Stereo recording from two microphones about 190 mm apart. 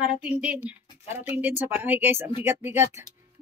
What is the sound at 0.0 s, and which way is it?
Speech, 5° right (ahead or behind).